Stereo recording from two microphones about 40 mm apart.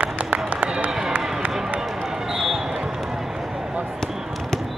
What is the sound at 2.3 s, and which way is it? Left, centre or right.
Basketball bounce, centre.